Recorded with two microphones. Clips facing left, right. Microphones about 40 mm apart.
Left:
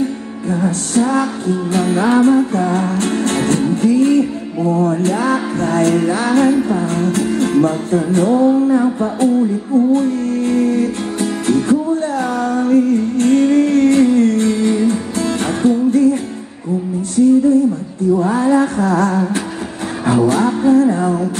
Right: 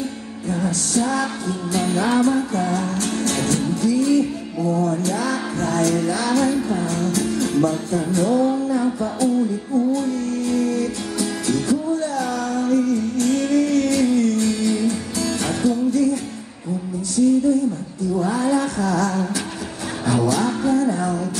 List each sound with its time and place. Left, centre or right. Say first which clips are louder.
0.5 s music: left 5 dB; left
18.1 s a sound: left 6 dB; left
20.1 s music: left 6 dB; left